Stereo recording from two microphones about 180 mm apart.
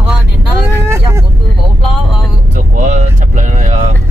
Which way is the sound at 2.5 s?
45° right (ahead or behind).